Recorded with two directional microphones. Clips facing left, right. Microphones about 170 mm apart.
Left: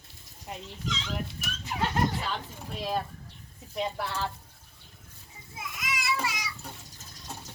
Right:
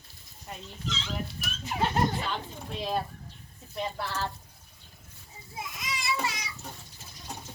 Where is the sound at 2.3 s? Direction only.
Centre (ahead or behind).